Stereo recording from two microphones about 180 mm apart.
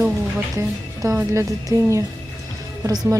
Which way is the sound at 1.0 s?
15° right (ahead or behind).